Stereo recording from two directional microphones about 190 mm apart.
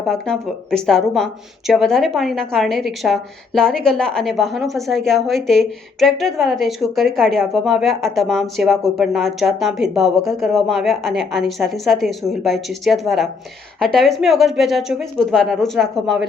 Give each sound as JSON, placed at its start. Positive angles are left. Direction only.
{"t": 0.1, "sound": "speech", "side_deg": 5}